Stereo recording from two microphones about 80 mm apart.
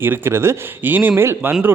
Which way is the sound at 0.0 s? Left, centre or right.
Right.